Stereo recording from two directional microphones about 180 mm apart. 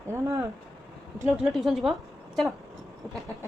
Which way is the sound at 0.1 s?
15° right (ahead or behind).